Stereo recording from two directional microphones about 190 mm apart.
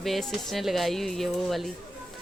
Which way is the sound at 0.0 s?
Centre (ahead or behind).